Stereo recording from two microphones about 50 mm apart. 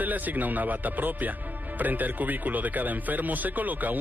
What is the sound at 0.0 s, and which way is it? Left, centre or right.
Speech, right.